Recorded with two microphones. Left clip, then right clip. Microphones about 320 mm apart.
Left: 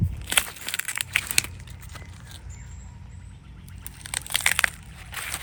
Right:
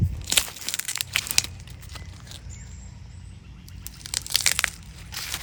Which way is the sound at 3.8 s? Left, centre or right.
Centre.